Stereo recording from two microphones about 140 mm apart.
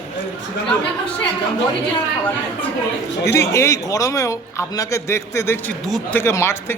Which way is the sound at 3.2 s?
20° left (ahead or behind).